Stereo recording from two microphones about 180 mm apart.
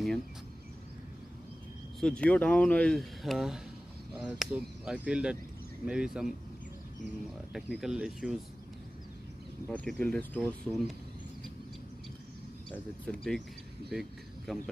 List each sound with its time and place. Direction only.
2.0 s speech: 5° left (ahead or behind)
9.7 s speech: 5° left (ahead or behind)
12.7 s speech: 5° left (ahead or behind)